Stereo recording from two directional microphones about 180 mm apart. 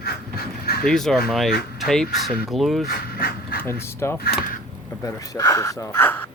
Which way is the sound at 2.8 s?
60° left (ahead or behind).